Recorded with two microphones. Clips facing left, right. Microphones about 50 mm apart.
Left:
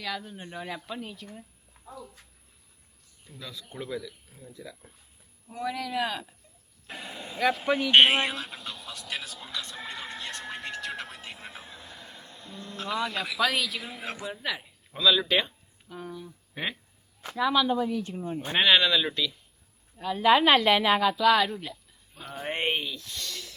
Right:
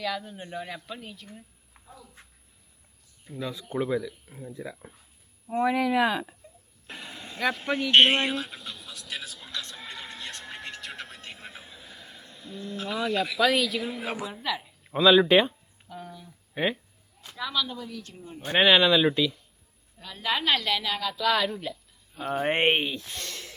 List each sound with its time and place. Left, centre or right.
0.0 s speech: centre
3.2 s speech: right
6.8 s a sound: centre
14.3 s speech: centre
14.8 s speech: right
15.9 s speech: centre
16.6 s speech: centre
17.3 s a woman's voice: centre
18.7 s speech: centre
20.0 s a woman's voice: centre
21.2 s speech: centre
22.4 s speech: right